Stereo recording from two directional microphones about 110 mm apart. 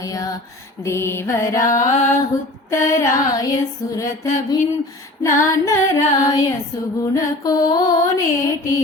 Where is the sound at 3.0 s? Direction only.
30° left (ahead or behind).